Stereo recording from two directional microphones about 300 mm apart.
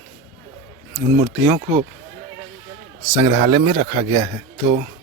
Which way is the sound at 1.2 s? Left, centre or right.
Centre.